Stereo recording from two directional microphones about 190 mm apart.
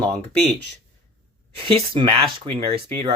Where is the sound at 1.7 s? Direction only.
30° right (ahead or behind).